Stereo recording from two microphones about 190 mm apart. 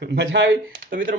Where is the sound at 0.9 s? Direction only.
45° right (ahead or behind).